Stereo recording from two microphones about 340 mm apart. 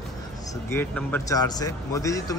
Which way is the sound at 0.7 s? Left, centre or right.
Centre.